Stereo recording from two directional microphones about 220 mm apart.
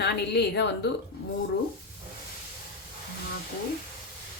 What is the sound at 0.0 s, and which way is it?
Speech, 50° left (ahead or behind).